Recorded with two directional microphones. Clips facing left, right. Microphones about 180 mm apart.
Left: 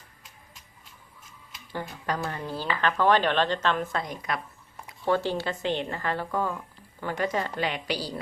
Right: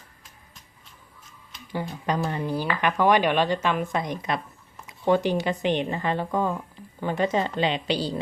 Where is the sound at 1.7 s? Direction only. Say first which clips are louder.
Right 4 dB; 15° right (ahead or behind).